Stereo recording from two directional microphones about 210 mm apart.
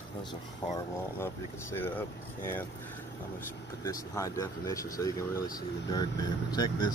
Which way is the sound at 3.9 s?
15° left (ahead or behind).